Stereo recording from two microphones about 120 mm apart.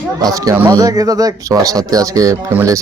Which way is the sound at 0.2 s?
30° right (ahead or behind).